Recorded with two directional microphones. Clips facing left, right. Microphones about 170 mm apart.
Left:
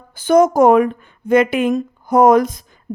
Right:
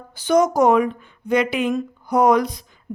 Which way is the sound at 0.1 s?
50° left (ahead or behind).